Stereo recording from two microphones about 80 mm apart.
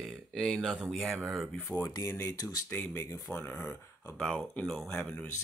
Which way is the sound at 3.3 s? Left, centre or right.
Left.